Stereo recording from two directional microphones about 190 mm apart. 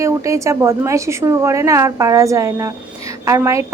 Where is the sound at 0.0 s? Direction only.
15° right (ahead or behind).